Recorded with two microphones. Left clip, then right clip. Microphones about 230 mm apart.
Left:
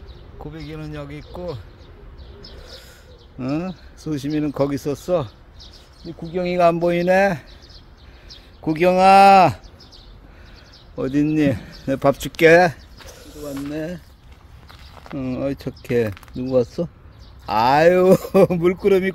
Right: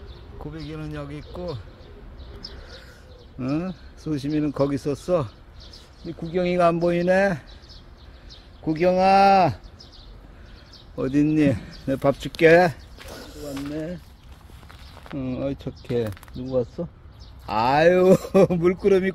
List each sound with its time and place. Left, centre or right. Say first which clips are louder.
0.4 s speech: left 2 dB; centre
3.3 s speech: left 2 dB; centre
6.3 s speech: left 3 dB; centre
8.6 s speech: left 5 dB; left
11.0 s speech: left 1 dB; centre
15.0 s speech: left 3 dB; centre
16.4 s speech: left 6 dB; left
17.5 s speech: left 4 dB; centre